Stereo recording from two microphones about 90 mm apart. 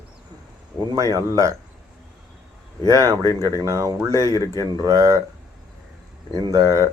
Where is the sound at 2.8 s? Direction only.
40° right (ahead or behind).